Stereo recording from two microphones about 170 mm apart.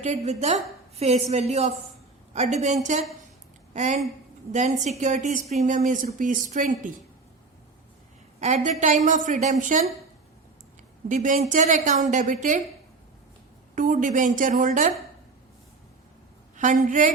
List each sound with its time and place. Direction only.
0.0 s a woman's voice: 40° right (ahead or behind)
8.4 s a woman's voice: 45° right (ahead or behind)
11.1 s a woman's voice: 50° right (ahead or behind)
13.7 s a woman's voice: 50° right (ahead or behind)
16.6 s a woman's voice: 50° right (ahead or behind)